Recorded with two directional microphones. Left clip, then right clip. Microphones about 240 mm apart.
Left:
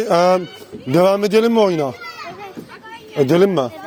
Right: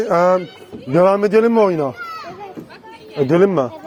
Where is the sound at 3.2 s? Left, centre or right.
Left.